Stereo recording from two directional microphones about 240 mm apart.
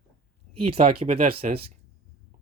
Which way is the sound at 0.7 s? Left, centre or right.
Right.